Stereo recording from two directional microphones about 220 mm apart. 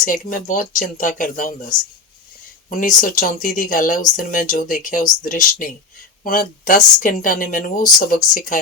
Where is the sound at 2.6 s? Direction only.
35° left (ahead or behind).